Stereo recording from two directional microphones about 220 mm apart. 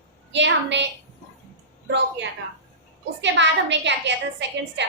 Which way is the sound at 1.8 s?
55° right (ahead or behind).